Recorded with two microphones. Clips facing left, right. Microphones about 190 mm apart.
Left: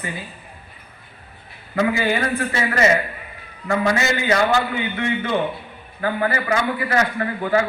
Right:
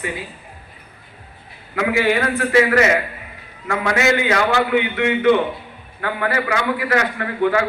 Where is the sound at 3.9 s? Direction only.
65° right (ahead or behind).